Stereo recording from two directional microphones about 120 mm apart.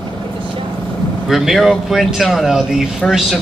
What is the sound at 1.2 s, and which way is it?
Speech, centre (ahead or behind).